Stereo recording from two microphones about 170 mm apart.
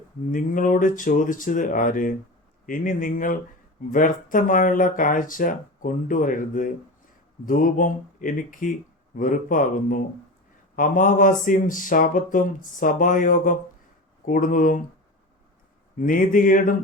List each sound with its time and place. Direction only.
0.3 s speech: 50° left (ahead or behind)
16.0 s speech: 50° left (ahead or behind)